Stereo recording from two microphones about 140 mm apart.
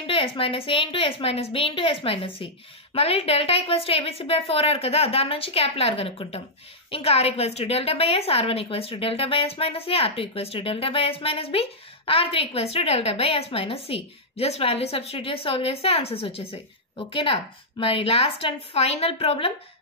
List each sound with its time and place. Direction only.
0.0 s a woman's voice: 40° left (ahead or behind)